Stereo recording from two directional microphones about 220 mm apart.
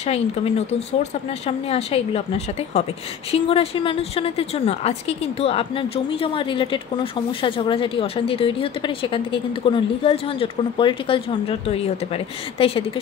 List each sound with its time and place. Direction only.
0.0 s a woman's voice: 30° left (ahead or behind)